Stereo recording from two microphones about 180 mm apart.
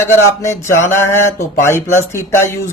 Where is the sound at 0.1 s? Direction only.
15° left (ahead or behind).